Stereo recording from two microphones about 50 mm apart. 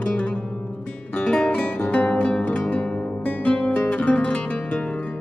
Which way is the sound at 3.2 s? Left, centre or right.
Left.